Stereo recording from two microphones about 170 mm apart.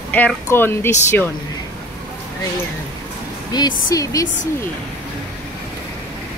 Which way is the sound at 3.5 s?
20° left (ahead or behind).